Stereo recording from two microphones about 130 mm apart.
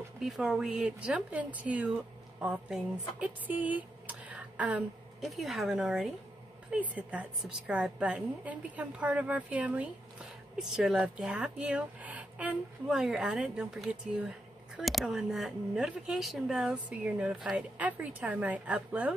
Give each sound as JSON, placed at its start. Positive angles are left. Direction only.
{"t": 0.2, "sound": "speech", "side_deg": -5}